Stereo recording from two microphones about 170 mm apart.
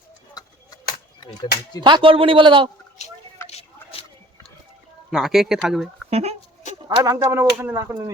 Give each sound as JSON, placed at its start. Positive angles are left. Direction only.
{"t": 0.4, "sound": "a sound", "side_deg": 20}
{"t": 1.8, "sound": "a man's voice", "side_deg": -30}
{"t": 3.5, "sound": "a sound", "side_deg": 35}
{"t": 5.1, "sound": "speech", "side_deg": 0}
{"t": 6.1, "sound": "speech", "side_deg": -35}
{"t": 6.8, "sound": "speech", "side_deg": -20}